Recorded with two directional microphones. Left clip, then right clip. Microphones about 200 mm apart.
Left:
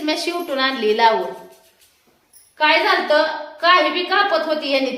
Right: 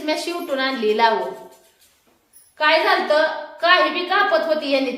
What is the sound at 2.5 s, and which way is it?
A woman's voice, 10° left (ahead or behind).